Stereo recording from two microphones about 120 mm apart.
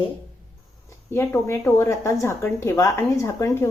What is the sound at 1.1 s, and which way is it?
A woman's voice, 20° left (ahead or behind).